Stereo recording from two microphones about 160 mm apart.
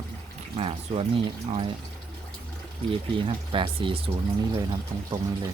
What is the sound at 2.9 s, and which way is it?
Speech, 30° right (ahead or behind).